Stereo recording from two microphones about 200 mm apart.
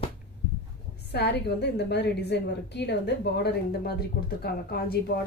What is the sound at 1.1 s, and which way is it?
A woman's voice, 55° left (ahead or behind).